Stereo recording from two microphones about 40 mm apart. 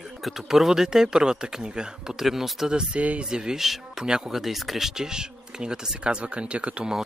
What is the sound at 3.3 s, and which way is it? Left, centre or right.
Speech, centre.